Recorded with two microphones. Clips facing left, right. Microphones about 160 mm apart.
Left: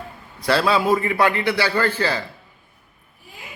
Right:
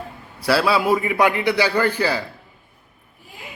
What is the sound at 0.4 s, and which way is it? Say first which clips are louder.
A man's voice: even; 5° right (ahead or behind).